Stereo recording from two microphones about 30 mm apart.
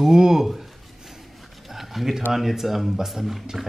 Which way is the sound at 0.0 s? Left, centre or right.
Centre.